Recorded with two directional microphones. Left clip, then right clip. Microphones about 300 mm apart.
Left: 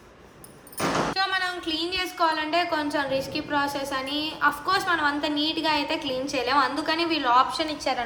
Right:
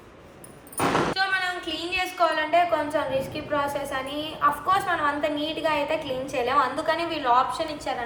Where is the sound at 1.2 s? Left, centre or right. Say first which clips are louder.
Right 1 dB; centre.